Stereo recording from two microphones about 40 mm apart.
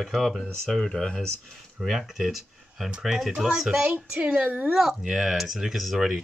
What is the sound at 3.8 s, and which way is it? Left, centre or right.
Speech, right.